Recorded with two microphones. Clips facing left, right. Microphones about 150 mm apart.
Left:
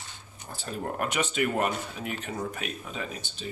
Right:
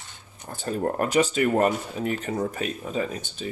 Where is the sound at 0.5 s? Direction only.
45° right (ahead or behind).